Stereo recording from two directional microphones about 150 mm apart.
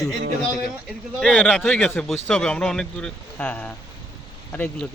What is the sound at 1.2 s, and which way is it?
Speech, 5° left (ahead or behind).